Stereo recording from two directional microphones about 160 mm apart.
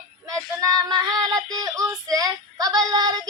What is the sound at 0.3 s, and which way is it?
Child singing, 20° right (ahead or behind).